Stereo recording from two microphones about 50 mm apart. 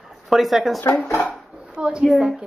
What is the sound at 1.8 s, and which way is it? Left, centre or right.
Speech, centre.